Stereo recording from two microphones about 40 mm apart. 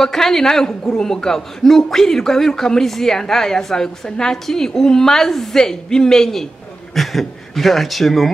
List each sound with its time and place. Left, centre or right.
0.0 s a man's voice: centre